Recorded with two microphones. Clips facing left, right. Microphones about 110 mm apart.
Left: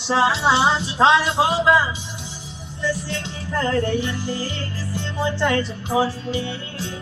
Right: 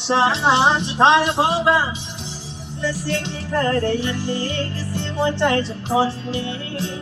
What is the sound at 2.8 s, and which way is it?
Music, 70° right (ahead or behind).